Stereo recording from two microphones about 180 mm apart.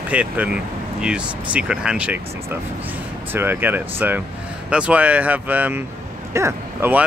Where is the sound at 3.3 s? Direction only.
10° right (ahead or behind).